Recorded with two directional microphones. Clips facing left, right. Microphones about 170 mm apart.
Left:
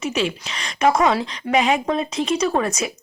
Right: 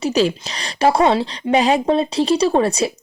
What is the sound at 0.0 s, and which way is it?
A woman's voice, 35° right (ahead or behind).